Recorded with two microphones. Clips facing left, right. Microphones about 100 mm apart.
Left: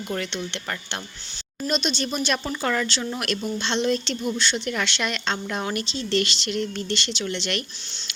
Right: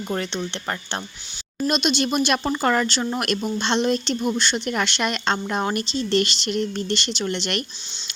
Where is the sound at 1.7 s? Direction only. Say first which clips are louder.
Right 4 dB; 65° right (ahead or behind).